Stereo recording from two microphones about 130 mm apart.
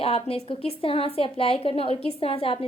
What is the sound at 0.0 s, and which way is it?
A woman's voice, 50° left (ahead or behind).